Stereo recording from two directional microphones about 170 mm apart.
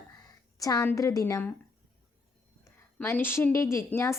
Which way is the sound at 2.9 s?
15° left (ahead or behind).